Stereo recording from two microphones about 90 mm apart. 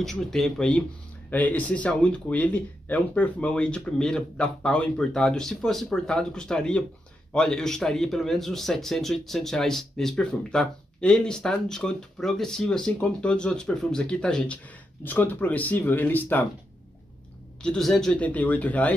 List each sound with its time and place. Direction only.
0.0 s a man's voice: 5° left (ahead or behind); by 16.4 s 20° left (ahead or behind)
17.6 s a man's voice: 5° left (ahead or behind)